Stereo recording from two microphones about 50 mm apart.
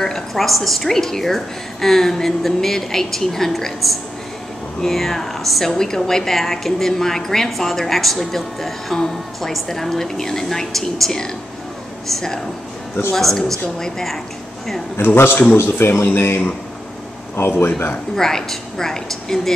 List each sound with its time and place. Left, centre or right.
0.0 s a woman's voice: centre
15.5 s speech: left
18.1 s a woman's voice: centre